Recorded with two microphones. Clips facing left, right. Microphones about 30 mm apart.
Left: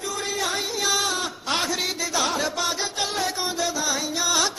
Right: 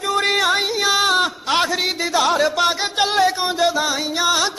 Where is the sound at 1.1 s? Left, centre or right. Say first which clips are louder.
Right 8 dB; right.